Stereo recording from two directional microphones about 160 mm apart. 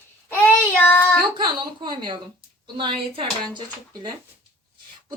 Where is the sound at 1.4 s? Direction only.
30° right (ahead or behind).